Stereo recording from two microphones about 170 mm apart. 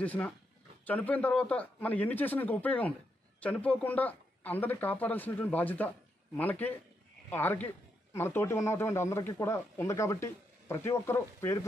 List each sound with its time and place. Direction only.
0.0 s a man's voice: 10° left (ahead or behind)